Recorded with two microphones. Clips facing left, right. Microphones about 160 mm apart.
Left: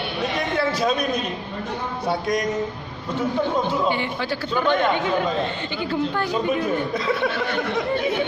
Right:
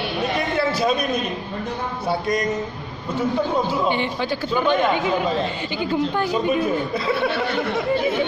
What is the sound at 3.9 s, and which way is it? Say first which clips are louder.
Speech: right 2 dB; 20° right (ahead or behind).